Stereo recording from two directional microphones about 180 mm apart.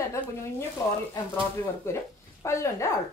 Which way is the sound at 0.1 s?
15° left (ahead or behind).